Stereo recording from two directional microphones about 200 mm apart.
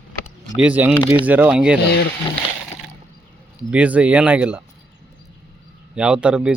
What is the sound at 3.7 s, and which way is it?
Speech, 5° right (ahead or behind).